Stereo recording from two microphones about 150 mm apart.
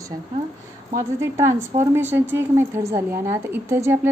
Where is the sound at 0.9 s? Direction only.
20° right (ahead or behind).